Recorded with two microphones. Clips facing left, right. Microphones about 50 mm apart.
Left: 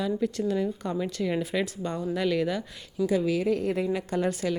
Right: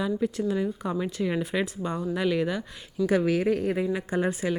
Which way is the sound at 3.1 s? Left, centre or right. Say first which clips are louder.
Right 2 dB; right.